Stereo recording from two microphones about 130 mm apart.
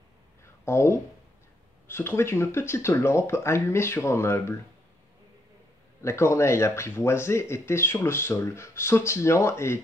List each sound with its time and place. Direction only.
0.7 s speech: 20° left (ahead or behind)
6.0 s speech: 20° left (ahead or behind)